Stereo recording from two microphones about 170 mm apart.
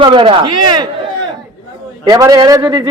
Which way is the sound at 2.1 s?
20° right (ahead or behind).